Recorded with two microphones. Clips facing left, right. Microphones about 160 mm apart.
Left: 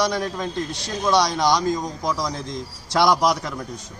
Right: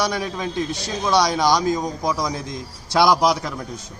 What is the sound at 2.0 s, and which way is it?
Speech, 20° right (ahead or behind).